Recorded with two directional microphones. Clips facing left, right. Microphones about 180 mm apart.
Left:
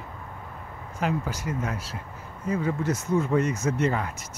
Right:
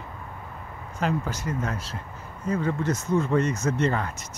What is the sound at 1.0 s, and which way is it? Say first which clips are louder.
Speech: right 1 dB; 5° left (ahead or behind).